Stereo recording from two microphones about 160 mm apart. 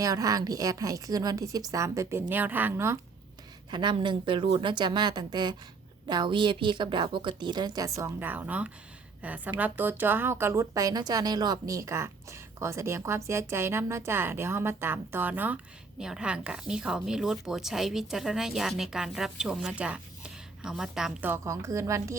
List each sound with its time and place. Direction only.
0.0 s a woman's voice: 20° right (ahead or behind)
3.7 s a woman's voice: 30° right (ahead or behind)